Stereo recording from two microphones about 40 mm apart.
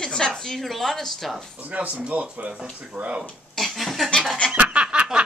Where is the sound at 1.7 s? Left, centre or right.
Right.